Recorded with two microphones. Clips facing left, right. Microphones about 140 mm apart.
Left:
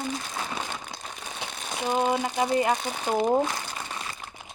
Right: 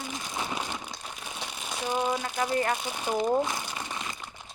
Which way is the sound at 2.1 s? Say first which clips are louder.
Left 4 dB; 25° left (ahead or behind).